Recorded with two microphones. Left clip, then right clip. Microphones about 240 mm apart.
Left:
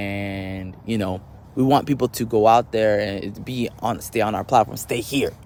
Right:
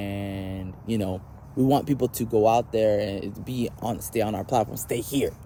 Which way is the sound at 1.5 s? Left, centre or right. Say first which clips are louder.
Left 4 dB; centre.